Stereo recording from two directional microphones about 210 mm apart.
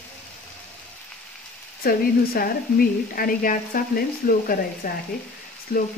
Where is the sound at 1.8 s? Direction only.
45° left (ahead or behind).